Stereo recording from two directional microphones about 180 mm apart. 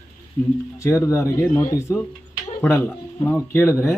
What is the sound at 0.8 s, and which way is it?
Speech, 15° left (ahead or behind).